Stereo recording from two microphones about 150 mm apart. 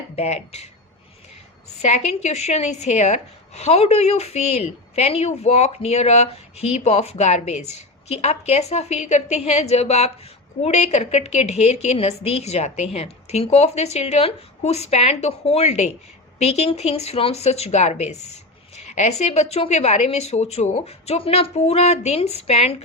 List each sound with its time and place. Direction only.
0.2 s speech: 45° left (ahead or behind)
1.8 s speech: 50° left (ahead or behind)